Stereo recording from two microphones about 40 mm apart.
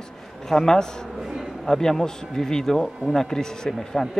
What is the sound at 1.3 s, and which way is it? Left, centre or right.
Speech, centre.